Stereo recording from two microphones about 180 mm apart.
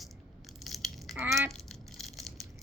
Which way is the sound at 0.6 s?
Centre (ahead or behind).